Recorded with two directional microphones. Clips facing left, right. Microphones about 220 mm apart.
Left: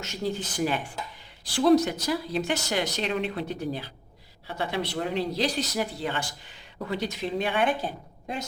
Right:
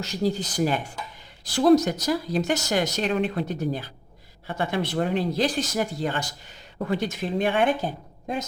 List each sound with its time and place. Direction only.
0.0 s speech: 35° right (ahead or behind)